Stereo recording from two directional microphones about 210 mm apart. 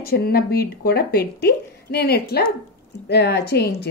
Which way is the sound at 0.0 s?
45° left (ahead or behind).